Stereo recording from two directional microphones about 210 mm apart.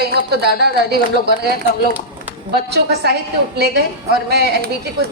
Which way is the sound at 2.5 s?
50° right (ahead or behind).